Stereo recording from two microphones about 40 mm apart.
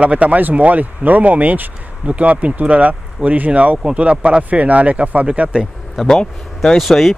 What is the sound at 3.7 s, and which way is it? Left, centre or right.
Speech, right.